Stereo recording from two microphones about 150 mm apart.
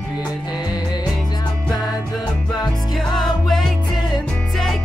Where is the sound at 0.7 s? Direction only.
30° left (ahead or behind).